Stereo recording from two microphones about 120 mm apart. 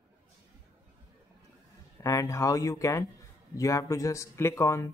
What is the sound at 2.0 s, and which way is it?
Speech, 25° left (ahead or behind).